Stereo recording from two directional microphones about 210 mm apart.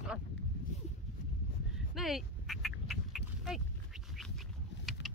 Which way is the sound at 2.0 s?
Centre (ahead or behind).